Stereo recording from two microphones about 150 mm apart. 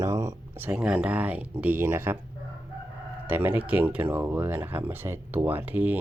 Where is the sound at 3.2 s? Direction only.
10° right (ahead or behind).